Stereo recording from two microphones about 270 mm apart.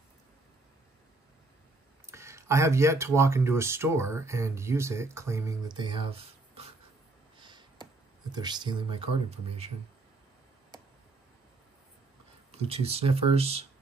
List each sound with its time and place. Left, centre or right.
2.0 s speech: centre
7.3 s a sound: centre
12.4 s speech: right